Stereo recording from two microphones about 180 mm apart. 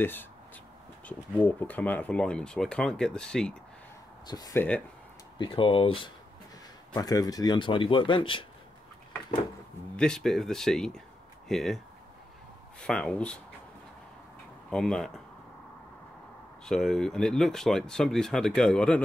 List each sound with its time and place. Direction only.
0.0 s speech: 10° left (ahead or behind)
4.3 s speech: 20° left (ahead or behind)
9.9 s speech: 5° left (ahead or behind)
12.8 s speech: 5° left (ahead or behind)
14.7 s speech: 5° left (ahead or behind)
16.6 s speech: 5° left (ahead or behind)